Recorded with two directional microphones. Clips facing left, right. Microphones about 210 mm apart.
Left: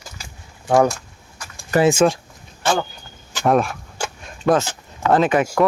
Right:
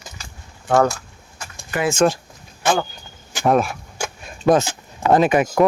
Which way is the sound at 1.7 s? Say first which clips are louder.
Left 6 dB; 40° left (ahead or behind).